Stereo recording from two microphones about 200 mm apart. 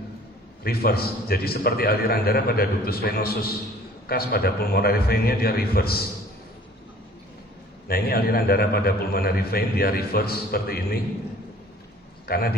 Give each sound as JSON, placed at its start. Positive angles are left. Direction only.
{"t": 0.7, "sound": "a man's voice", "side_deg": 50}
{"t": 7.9, "sound": "a man's voice", "side_deg": 50}
{"t": 12.3, "sound": "a man's voice", "side_deg": 50}